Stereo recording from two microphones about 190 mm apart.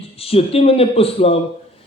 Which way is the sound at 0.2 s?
30° left (ahead or behind).